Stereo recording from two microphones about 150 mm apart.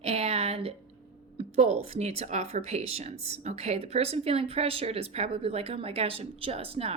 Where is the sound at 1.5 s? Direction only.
45° right (ahead or behind).